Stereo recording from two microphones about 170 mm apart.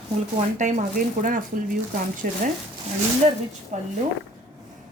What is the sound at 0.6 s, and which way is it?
A woman's voice, 45° right (ahead or behind).